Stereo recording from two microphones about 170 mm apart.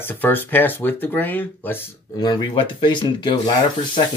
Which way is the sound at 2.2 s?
25° left (ahead or behind).